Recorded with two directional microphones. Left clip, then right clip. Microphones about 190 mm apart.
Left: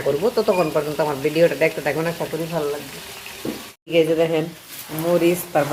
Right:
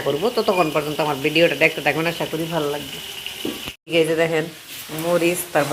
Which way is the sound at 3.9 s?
Centre (ahead or behind).